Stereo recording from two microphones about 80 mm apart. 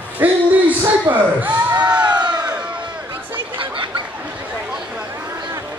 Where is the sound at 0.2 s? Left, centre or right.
Right.